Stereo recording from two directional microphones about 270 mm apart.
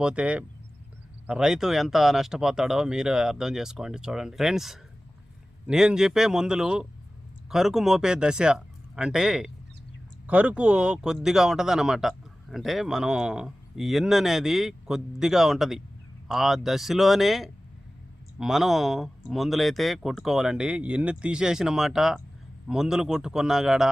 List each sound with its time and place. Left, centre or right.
0.0 s speech: centre